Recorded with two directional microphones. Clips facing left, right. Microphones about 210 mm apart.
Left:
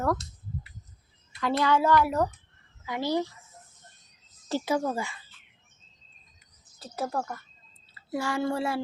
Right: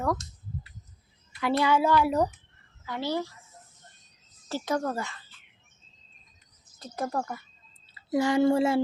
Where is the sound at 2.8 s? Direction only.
15° left (ahead or behind).